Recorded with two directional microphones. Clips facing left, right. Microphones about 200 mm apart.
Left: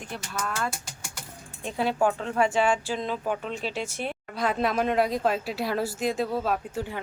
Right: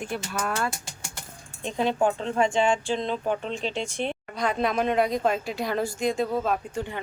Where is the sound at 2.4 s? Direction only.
5° left (ahead or behind).